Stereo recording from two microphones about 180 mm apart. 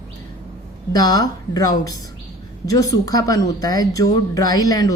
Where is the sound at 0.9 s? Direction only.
20° left (ahead or behind).